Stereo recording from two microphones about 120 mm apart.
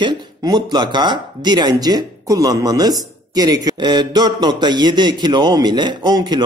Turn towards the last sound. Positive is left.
turn(degrees=-35)  # may be behind; listen again after turning